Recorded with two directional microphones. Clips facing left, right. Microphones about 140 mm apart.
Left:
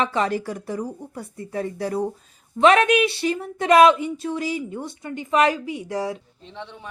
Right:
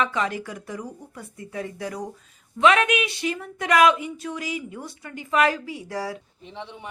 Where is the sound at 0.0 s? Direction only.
35° left (ahead or behind).